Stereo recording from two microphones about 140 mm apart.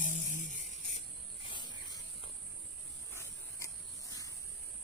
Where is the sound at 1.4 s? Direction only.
35° left (ahead or behind).